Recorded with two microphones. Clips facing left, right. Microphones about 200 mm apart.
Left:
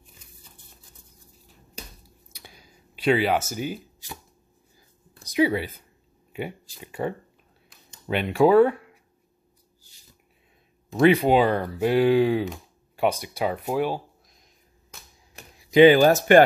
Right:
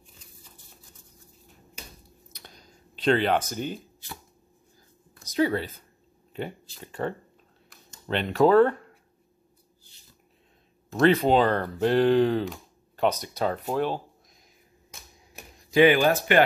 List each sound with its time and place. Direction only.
2.3 s a sound: 10° left (ahead or behind)
5.3 s speech: 10° left (ahead or behind)
10.9 s speech: 10° left (ahead or behind)
15.9 s speech: 40° left (ahead or behind)